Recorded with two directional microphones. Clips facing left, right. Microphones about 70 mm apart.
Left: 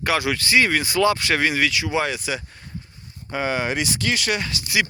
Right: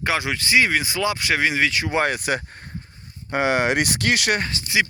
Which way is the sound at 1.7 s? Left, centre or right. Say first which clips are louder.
Right 1 dB; right.